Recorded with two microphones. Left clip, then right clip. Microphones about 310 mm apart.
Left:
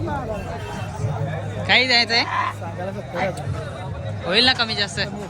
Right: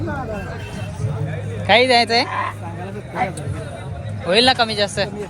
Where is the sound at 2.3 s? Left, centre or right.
Centre.